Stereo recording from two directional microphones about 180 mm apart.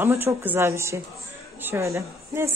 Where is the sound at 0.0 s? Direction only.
10° right (ahead or behind).